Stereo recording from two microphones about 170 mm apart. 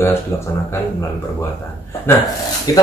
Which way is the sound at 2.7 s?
20° left (ahead or behind).